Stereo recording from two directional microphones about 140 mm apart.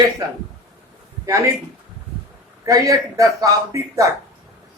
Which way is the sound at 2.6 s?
25° right (ahead or behind).